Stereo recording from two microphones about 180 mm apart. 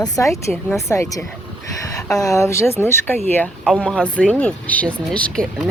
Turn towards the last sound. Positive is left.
turn(degrees=5)  # may be behind; listen again after turning